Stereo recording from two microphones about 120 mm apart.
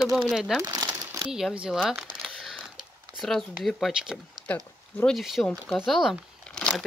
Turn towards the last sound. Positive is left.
turn(degrees=0)  # may be behind; listen again after turning